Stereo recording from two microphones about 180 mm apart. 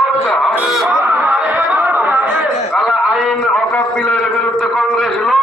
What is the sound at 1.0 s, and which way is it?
Chatter, 10° right (ahead or behind).